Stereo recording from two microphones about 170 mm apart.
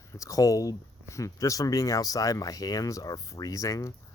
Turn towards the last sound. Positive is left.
turn(degrees=20)  # may be behind; listen again after turning